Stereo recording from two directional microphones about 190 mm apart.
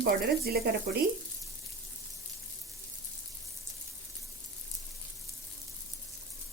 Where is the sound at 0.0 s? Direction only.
55° right (ahead or behind).